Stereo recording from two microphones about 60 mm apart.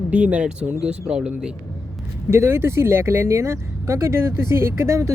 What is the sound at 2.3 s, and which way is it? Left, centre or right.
Speech, right.